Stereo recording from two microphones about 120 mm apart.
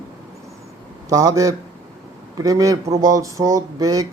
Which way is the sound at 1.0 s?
30° right (ahead or behind).